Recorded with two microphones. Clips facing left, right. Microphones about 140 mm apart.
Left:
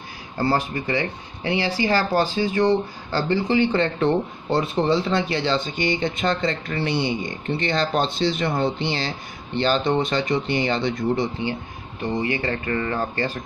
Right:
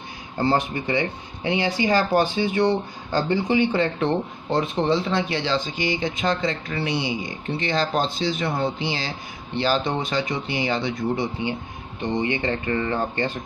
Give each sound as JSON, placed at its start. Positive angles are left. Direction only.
{"t": 0.4, "sound": "speech", "side_deg": -20}
{"t": 12.0, "sound": "speech", "side_deg": -25}